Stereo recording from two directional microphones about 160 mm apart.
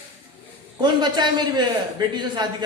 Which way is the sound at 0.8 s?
25° right (ahead or behind).